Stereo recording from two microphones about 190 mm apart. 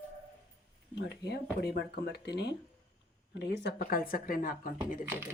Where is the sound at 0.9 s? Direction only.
60° left (ahead or behind).